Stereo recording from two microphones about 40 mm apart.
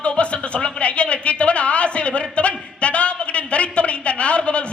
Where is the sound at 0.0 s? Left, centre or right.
Left.